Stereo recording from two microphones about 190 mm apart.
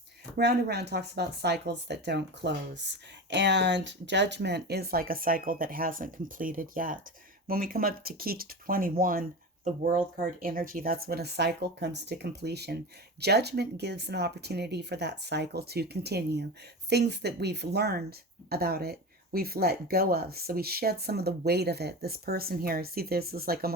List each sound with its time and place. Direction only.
0.3 s speech: 60° right (ahead or behind); by 10.0 s 40° right (ahead or behind)
10.4 s speech: 50° right (ahead or behind)